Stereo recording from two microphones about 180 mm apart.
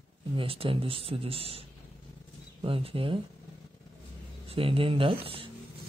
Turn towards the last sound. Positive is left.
turn(degrees=-30)  # may be behind; listen again after turning